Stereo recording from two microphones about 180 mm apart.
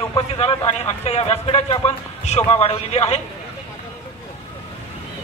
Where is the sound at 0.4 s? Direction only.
35° left (ahead or behind).